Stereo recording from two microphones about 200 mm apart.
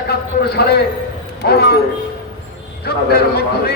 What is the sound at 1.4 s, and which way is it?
Speech, 55° left (ahead or behind).